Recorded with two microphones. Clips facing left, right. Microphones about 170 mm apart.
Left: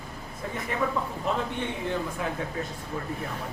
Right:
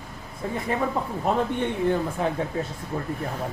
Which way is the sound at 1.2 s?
50° right (ahead or behind).